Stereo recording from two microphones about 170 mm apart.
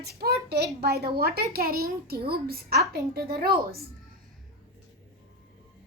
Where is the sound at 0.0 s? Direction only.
70° right (ahead or behind).